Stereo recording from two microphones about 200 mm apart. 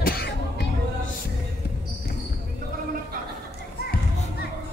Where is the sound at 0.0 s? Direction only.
50° left (ahead or behind).